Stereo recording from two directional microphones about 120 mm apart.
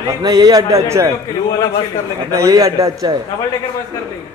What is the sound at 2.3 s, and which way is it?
Speech, 30° right (ahead or behind).